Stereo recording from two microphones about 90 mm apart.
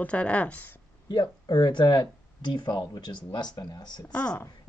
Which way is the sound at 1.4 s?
60° left (ahead or behind).